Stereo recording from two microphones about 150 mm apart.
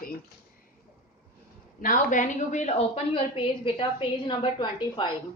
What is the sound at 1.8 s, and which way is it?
A woman's voice, 65° left (ahead or behind).